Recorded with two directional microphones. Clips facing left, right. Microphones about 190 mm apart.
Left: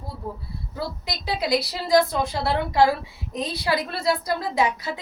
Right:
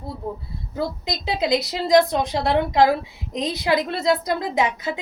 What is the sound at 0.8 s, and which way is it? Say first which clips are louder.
A woman's voice: right 5 dB; 20° right (ahead or behind).